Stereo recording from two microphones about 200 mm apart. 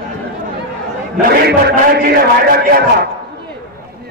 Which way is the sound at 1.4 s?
50° right (ahead or behind).